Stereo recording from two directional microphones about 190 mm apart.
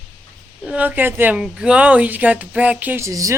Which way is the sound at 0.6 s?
10° right (ahead or behind).